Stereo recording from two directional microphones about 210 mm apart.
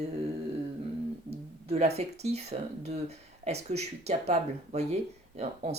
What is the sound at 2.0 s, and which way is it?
Speech, 30° right (ahead or behind).